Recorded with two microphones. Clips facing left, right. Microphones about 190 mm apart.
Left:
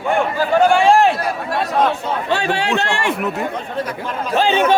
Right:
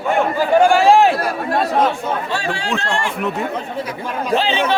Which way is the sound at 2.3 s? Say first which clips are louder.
Left 4 dB; 65° left (ahead or behind).